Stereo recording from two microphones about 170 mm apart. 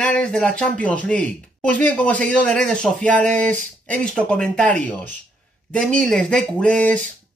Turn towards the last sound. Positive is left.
turn(degrees=5)  # may be behind; listen again after turning